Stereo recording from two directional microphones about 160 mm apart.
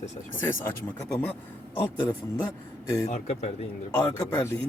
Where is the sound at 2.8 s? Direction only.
20° left (ahead or behind).